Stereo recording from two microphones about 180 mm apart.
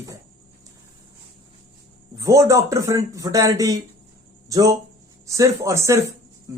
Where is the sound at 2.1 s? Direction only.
15° right (ahead or behind).